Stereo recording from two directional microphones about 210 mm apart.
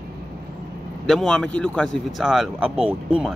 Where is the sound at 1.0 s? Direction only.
Centre (ahead or behind).